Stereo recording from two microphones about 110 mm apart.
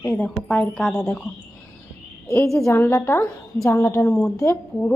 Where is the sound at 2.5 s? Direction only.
25° left (ahead or behind).